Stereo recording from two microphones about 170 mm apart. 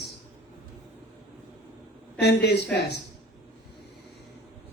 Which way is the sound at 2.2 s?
90° left.